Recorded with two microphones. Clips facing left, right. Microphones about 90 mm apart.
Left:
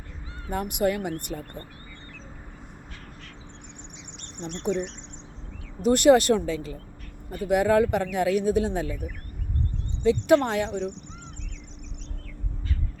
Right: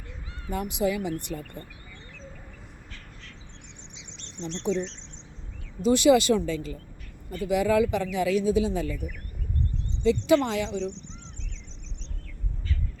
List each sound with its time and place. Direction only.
0.5 s speech: 60° left (ahead or behind)
3.9 s a sound: 55° left (ahead or behind)
5.8 s speech: 60° left (ahead or behind)
10.0 s speech: 55° left (ahead or behind)